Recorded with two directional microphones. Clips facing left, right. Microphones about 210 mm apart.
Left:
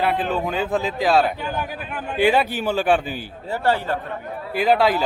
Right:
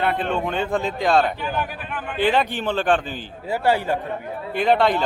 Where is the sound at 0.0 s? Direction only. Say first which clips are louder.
Left 1 dB; 5° left (ahead or behind).